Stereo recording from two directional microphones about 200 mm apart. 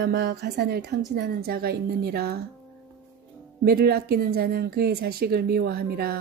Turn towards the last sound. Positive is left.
turn(degrees=-50)  # may be behind; listen again after turning